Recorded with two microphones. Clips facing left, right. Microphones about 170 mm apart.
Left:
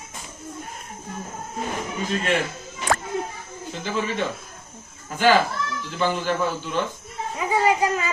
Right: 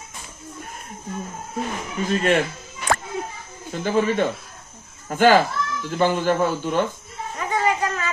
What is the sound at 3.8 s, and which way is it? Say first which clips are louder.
A man's voice: right 6 dB; 50° right (ahead or behind).